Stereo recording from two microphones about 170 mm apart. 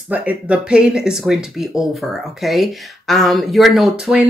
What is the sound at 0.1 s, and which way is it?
Speech, 10° right (ahead or behind).